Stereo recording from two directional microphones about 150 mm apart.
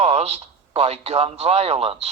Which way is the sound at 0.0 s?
45° right (ahead or behind).